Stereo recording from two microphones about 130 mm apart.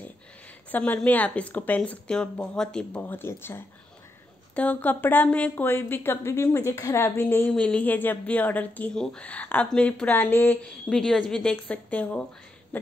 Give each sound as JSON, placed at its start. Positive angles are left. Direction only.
{"t": 0.7, "sound": "speech", "side_deg": 10}